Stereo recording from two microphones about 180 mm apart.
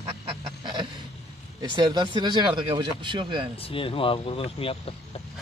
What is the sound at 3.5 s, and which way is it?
Speech, 30° left (ahead or behind).